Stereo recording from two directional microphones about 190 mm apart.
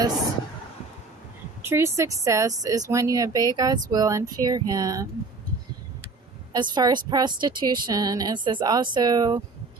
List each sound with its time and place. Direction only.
1.6 s speech: 15° right (ahead or behind)
6.5 s speech: 20° right (ahead or behind)